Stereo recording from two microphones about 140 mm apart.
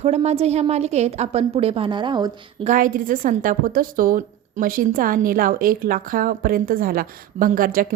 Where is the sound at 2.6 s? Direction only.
70° right (ahead or behind); by 7.9 s 90° right.